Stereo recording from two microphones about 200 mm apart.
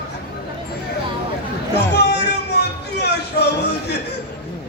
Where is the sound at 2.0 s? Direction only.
55° left (ahead or behind).